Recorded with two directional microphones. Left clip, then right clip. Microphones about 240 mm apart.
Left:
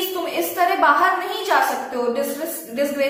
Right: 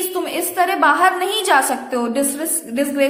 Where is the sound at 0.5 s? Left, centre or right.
Right.